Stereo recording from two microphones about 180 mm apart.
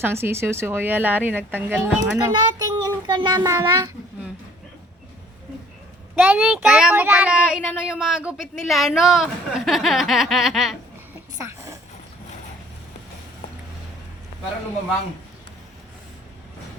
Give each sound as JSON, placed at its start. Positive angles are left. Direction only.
{"t": 0.0, "sound": "speech", "side_deg": -15}
{"t": 6.1, "sound": "speech", "side_deg": -5}
{"t": 11.4, "sound": "a sound", "side_deg": -15}